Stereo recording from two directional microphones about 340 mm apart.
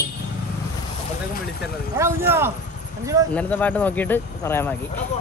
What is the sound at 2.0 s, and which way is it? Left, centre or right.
Speech, centre.